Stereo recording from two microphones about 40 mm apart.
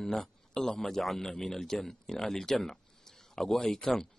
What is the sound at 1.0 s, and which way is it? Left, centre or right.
Speech, centre.